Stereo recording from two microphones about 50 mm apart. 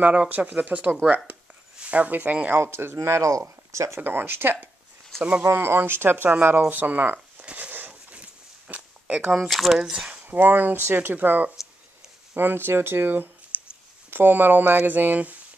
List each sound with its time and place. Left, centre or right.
0.0 s speech: right
2.6 s speech: right
4.0 s speech: right
7.5 s a sound: right
7.9 s a sound: right
9.4 s speech: centre
10.1 s speech: right
12.4 s speech: right
13.5 s a sound: right
14.1 s speech: right